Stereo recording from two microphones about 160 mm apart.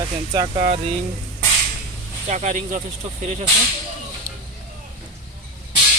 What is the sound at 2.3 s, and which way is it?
Speech, 50° right (ahead or behind).